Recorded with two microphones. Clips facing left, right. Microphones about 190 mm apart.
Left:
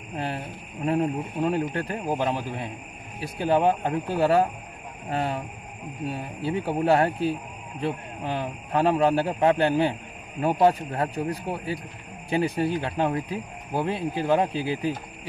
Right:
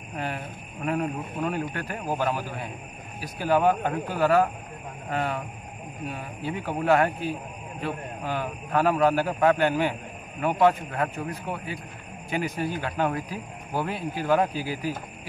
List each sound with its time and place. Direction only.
0.1 s a man's voice: 30° left (ahead or behind)
6.4 s a man's voice: 30° left (ahead or behind)